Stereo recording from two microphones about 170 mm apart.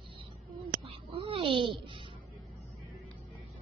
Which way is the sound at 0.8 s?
30° right (ahead or behind).